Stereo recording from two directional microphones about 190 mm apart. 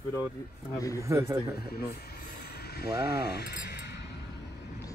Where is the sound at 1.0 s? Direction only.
15° right (ahead or behind).